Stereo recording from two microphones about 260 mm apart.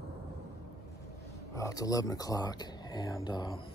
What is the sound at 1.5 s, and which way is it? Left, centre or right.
Speech, centre.